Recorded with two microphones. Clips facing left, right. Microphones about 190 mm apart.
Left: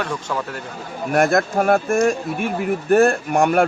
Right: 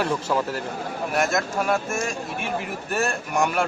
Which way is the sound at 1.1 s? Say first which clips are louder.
Left 7 dB; 55° left (ahead or behind).